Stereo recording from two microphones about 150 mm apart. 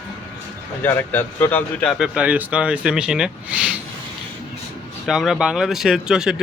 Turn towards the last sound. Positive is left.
turn(degrees=-5)  # may be behind; listen again after turning